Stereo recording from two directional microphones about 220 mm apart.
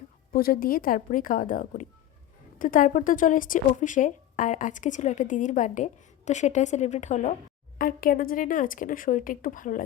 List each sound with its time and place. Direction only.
0.3 s speech: 40° left (ahead or behind)